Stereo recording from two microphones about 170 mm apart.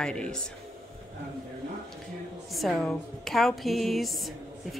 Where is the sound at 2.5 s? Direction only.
Centre (ahead or behind).